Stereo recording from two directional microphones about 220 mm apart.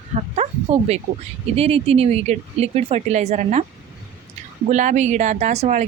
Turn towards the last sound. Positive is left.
turn(degrees=-30)  # may be behind; listen again after turning